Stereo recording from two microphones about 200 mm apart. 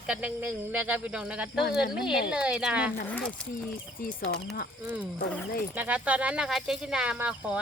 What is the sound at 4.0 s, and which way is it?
Speech, 45° left (ahead or behind).